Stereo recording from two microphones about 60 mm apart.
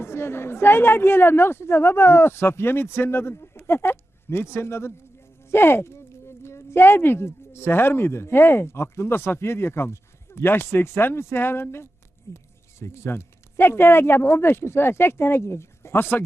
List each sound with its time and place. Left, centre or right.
0.0 s a woman's voice: left